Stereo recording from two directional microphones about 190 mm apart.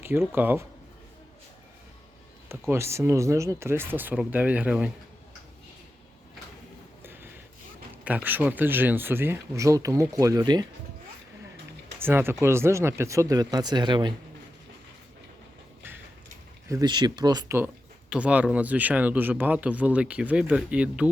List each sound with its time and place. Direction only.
0.0 s speech: 10° right (ahead or behind)
2.5 s speech: 15° right (ahead or behind)
7.0 s mechanisms: 10° right (ahead or behind)
8.0 s speech: 10° right (ahead or behind)
11.9 s speech: 10° right (ahead or behind)
16.6 s speech: 20° right (ahead or behind)
18.1 s speech: 5° right (ahead or behind)